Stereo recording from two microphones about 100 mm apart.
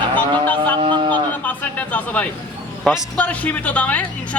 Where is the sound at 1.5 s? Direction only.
15° left (ahead or behind).